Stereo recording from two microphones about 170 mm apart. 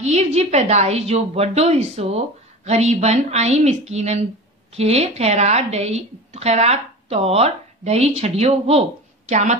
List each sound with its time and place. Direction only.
0.0 s a woman's voice: 40° right (ahead or behind)